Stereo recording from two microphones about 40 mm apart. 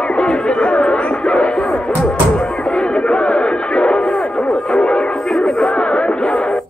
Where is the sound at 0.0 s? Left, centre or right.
Left.